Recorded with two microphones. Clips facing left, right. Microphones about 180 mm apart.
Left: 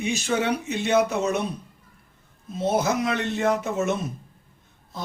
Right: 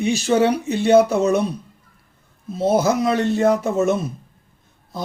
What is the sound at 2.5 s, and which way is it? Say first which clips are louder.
Speech: right 5 dB; 35° right (ahead or behind).